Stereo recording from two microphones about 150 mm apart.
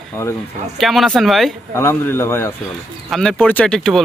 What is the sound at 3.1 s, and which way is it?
Speech, 5° left (ahead or behind).